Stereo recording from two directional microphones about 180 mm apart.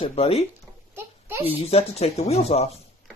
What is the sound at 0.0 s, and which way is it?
Speech, 35° left (ahead or behind).